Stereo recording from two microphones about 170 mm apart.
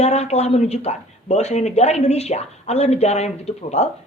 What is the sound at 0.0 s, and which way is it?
Speech, 40° left (ahead or behind).